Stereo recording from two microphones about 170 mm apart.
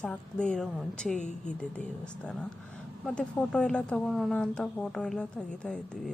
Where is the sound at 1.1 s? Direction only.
45° left (ahead or behind).